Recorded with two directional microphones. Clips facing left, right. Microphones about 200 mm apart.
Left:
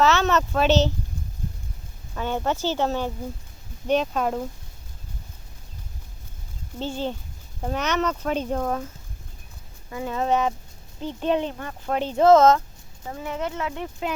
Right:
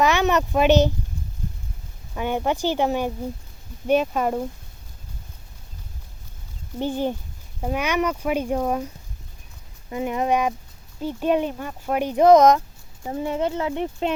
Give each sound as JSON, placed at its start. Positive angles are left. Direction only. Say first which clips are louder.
{"t": 0.0, "sound": "a child's voice", "louder": "right 1 dB", "side_deg": -15}
{"t": 2.1, "sound": "speech", "louder": "right 2 dB", "side_deg": -15}
{"t": 6.7, "sound": "speech", "louder": "right 4 dB", "side_deg": -15}
{"t": 9.9, "sound": "speech", "louder": "right 2 dB", "side_deg": -20}